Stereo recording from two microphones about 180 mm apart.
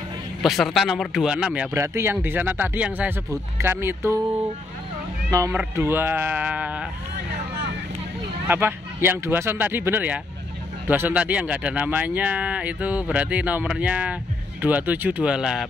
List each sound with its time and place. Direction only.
0.4 s speech: centre (ahead or behind)
5.3 s speech: 15° right (ahead or behind)
8.5 s speech: 10° right (ahead or behind)